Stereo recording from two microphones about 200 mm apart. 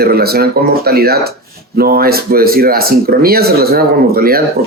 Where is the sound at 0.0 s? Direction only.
50° right (ahead or behind).